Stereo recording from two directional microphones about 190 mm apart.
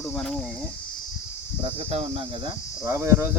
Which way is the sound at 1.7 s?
35° right (ahead or behind).